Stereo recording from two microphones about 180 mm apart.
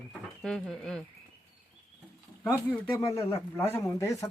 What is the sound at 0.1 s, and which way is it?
Speech, 5° left (ahead or behind).